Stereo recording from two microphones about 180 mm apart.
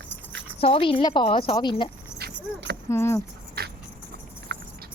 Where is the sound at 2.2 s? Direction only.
75° right (ahead or behind).